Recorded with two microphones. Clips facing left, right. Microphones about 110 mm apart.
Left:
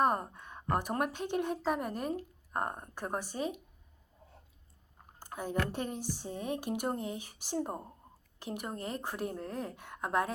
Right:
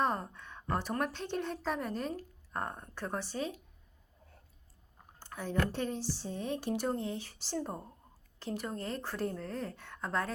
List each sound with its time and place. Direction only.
0.0 s a woman's voice: 15° left (ahead or behind)
5.4 s a woman's voice: 15° left (ahead or behind)